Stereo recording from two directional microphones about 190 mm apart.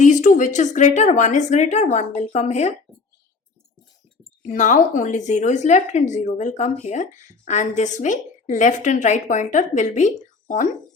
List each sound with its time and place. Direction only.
0.0 s a woman's voice: 40° left (ahead or behind)
4.4 s a woman's voice: 40° left (ahead or behind)